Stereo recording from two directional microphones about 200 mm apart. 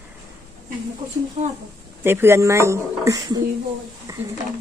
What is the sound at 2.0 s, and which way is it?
Speech, 10° right (ahead or behind).